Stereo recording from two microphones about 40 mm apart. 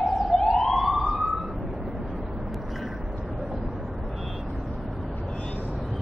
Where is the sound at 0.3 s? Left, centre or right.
Centre.